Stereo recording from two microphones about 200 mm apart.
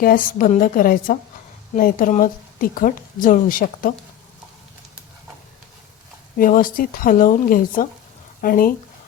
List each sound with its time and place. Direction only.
0.0 s a woman's voice: 45° left (ahead or behind)
6.3 s a woman's voice: 45° left (ahead or behind)